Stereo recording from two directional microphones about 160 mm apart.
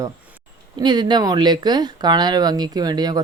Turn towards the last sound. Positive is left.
turn(degrees=-25)  # may be behind; listen again after turning